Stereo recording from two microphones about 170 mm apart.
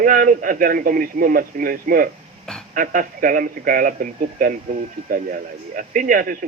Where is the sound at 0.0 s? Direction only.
50° right (ahead or behind).